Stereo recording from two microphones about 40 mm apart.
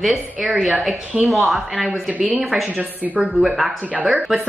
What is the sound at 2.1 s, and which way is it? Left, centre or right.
Speech, right.